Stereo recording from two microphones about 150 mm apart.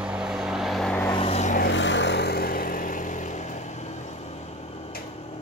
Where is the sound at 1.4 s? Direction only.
55° left (ahead or behind).